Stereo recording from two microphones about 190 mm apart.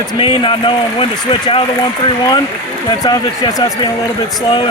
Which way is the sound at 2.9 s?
20° left (ahead or behind).